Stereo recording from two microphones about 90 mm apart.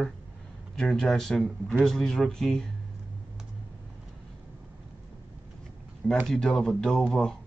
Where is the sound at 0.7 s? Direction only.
5° left (ahead or behind).